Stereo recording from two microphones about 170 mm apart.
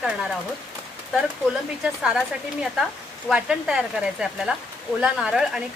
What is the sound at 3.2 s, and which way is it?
Speech, 5° right (ahead or behind).